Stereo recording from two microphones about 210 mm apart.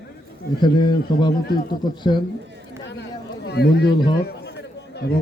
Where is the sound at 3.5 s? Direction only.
50° left (ahead or behind).